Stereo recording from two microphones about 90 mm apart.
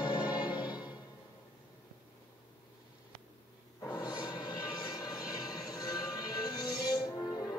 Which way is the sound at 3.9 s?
50° left (ahead or behind).